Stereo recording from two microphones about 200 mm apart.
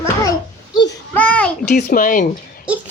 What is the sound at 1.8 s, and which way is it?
Speech, 40° left (ahead or behind).